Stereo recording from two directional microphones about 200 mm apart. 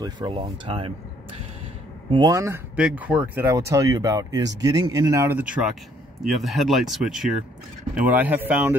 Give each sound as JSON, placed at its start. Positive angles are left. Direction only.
{"t": 0.0, "sound": "speech", "side_deg": -25}
{"t": 2.0, "sound": "speech", "side_deg": -20}